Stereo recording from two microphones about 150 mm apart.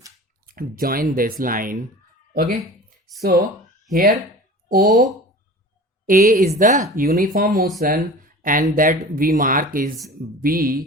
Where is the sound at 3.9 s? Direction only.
70° right (ahead or behind).